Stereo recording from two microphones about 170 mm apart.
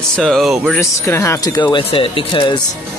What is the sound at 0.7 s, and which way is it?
Speech, 15° left (ahead or behind).